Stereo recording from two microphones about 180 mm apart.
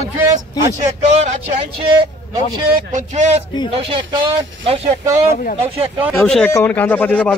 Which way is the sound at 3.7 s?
30° right (ahead or behind).